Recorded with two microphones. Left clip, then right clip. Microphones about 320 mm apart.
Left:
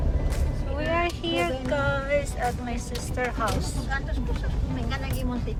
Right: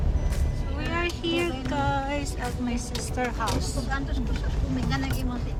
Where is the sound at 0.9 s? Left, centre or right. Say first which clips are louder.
Left 2 dB; centre.